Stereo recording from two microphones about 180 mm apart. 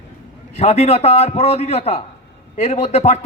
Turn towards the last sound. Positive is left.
turn(degrees=35)  # may be behind; listen again after turning